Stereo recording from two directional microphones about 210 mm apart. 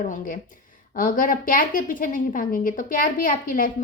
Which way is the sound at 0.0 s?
40° left (ahead or behind).